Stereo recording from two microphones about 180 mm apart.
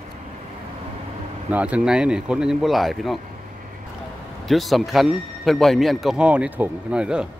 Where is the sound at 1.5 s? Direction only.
5° right (ahead or behind).